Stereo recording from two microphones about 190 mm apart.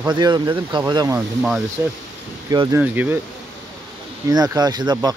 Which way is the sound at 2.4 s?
20° right (ahead or behind).